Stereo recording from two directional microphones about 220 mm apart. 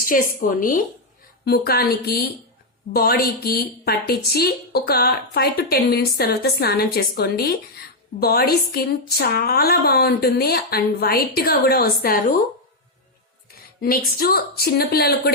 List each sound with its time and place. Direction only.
0.6 s a woman's voice: 40° left (ahead or behind)
13.8 s a woman's voice: 40° left (ahead or behind)